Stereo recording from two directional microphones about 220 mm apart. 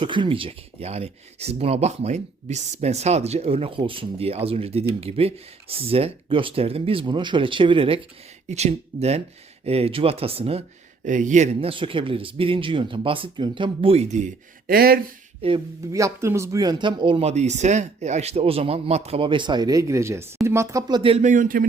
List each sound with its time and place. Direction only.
0.0 s speech: 20° right (ahead or behind)
14.7 s speech: 45° right (ahead or behind)
15.4 s speech: 25° right (ahead or behind); by 21.7 s 40° right (ahead or behind)